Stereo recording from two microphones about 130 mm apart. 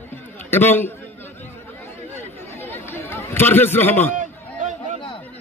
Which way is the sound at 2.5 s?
20° left (ahead or behind).